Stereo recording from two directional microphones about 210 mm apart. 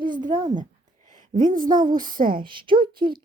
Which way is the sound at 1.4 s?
40° right (ahead or behind).